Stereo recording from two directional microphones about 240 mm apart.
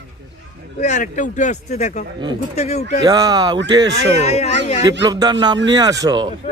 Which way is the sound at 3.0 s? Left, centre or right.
Centre.